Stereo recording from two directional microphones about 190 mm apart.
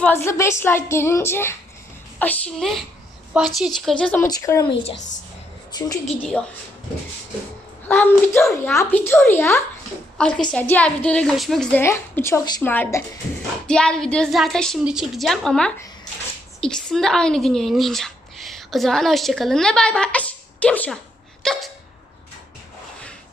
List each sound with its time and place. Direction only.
0.0 s a woman's voice: 10° left (ahead or behind)
7.9 s a woman's voice: 10° left (ahead or behind)
21.4 s a sound: centre (ahead or behind)